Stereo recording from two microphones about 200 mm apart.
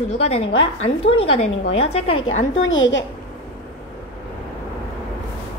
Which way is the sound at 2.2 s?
70° left (ahead or behind).